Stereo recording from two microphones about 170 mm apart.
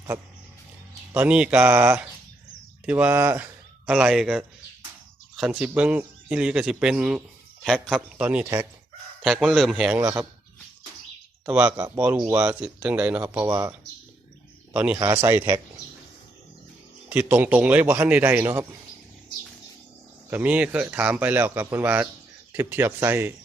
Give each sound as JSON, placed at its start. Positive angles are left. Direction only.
{"t": 1.1, "sound": "a man's voice", "side_deg": -10}
{"t": 11.4, "sound": "a man's voice", "side_deg": -5}
{"t": 17.1, "sound": "a man's voice", "side_deg": -10}
{"t": 20.3, "sound": "a man's voice", "side_deg": -10}